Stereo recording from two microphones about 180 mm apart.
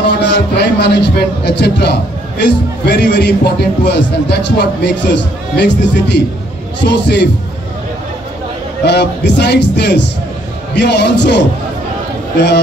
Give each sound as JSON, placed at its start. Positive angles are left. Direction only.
{"t": 0.2, "sound": "a man's voice", "side_deg": 75}
{"t": 8.8, "sound": "a man's voice", "side_deg": 70}